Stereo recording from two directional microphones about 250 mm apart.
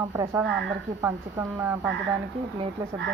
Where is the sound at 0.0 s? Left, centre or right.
Centre.